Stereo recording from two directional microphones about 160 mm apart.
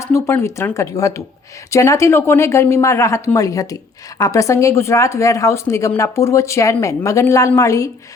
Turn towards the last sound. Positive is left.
turn(degrees=20)  # may be behind; listen again after turning